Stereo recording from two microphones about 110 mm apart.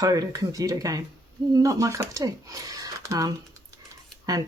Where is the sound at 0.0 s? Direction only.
35° right (ahead or behind).